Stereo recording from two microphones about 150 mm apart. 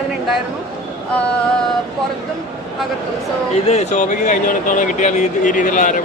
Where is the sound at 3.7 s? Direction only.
50° left (ahead or behind).